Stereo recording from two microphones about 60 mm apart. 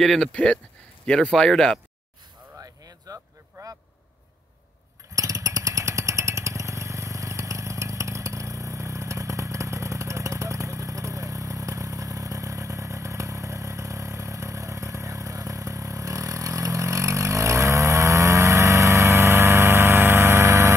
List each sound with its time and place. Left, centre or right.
0.0 s speech: centre
0.3 s speech: centre
2.6 s a sound: right
3.6 s vehicle: right
5.1 s motorcycle: right